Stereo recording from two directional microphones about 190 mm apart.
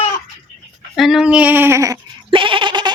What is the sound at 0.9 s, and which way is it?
Bleat, centre (ahead or behind).